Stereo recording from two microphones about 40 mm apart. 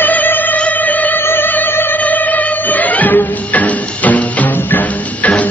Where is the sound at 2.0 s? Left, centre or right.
Left.